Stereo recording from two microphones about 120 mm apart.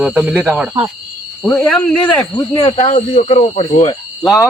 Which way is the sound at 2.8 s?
90° left.